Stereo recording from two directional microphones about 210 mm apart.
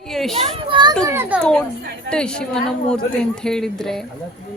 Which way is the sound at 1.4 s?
5° left (ahead or behind).